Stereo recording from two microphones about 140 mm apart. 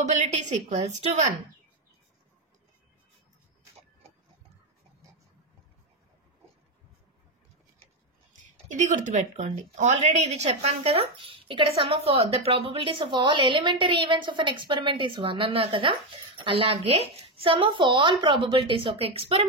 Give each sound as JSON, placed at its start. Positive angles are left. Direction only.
{"t": 0.1, "sound": "a woman's voice", "side_deg": -60}
{"t": 8.5, "sound": "a woman's voice", "side_deg": -60}